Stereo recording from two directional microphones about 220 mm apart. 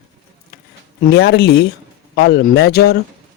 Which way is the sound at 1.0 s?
45° left (ahead or behind).